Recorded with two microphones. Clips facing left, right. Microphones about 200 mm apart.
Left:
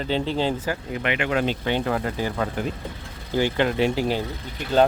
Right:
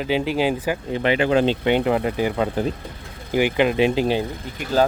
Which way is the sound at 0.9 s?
30° right (ahead or behind).